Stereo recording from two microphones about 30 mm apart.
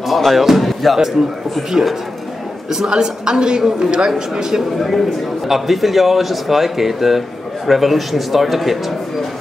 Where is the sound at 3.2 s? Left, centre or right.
Right.